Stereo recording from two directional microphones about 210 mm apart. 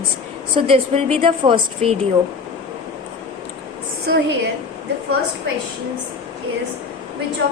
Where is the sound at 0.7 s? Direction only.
25° right (ahead or behind).